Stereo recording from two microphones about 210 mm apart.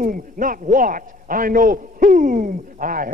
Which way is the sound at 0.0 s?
40° right (ahead or behind).